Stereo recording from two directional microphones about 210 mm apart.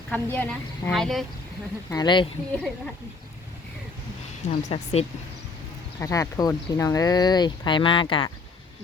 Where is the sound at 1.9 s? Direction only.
20° left (ahead or behind).